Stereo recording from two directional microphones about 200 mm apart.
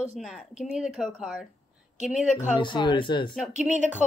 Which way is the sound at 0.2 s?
Centre (ahead or behind).